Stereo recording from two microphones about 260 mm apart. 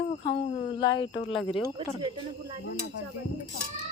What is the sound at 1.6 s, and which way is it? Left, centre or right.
Speech, centre.